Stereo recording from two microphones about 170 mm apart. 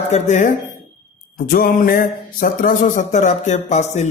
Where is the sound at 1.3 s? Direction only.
55° left (ahead or behind).